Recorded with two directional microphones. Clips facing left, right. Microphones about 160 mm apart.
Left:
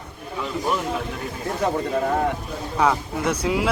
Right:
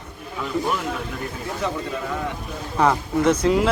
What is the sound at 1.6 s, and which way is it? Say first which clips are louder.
Speech: left 5 dB; 45° left (ahead or behind).